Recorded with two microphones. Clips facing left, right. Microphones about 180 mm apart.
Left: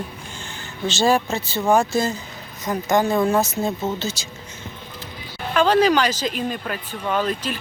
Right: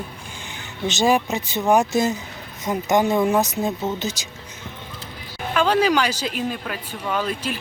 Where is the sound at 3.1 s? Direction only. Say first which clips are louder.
Even; 10° right (ahead or behind).